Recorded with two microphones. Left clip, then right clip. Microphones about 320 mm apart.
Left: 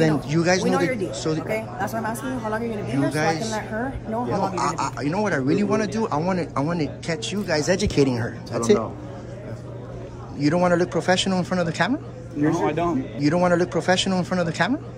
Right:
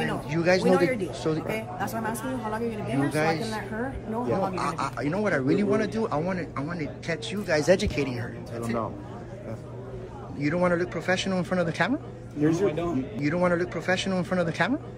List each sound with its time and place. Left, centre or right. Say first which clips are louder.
0.1 s speech: left 3 dB; centre
10.4 s speech: left 5 dB; centre
12.6 s a man's voice: left 4 dB; left
13.2 s speech: left 5 dB; centre